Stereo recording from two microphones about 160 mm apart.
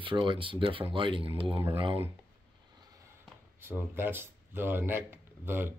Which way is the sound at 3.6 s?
15° right (ahead or behind).